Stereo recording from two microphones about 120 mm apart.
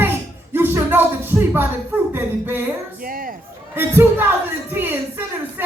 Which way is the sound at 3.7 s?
20° right (ahead or behind).